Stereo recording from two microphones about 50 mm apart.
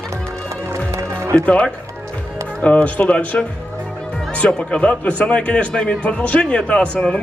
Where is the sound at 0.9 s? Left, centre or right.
Right.